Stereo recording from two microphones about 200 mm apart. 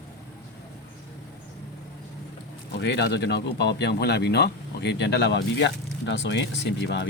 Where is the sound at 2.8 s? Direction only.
60° left (ahead or behind).